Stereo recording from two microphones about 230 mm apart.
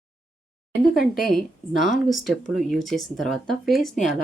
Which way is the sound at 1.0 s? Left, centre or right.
Centre.